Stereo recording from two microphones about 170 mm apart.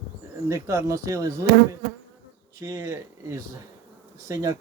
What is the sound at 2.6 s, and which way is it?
Speech, 20° right (ahead or behind).